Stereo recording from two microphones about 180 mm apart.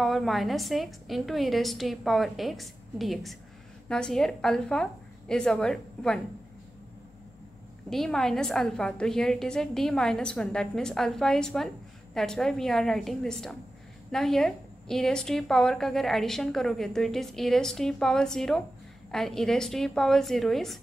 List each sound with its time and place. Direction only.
0.0 s a woman's voice: centre (ahead or behind)
7.9 s a woman's voice: centre (ahead or behind)